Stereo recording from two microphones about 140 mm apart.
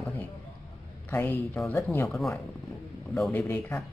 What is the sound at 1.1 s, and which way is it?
Speech, 15° left (ahead or behind).